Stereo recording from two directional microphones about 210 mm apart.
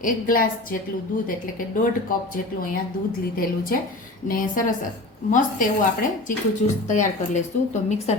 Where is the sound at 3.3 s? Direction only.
45° left (ahead or behind).